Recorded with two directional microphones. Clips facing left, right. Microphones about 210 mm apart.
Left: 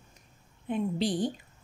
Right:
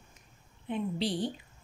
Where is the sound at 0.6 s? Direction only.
45° left (ahead or behind).